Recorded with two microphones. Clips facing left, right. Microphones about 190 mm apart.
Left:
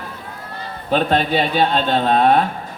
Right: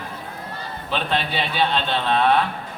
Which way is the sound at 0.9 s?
45° left (ahead or behind).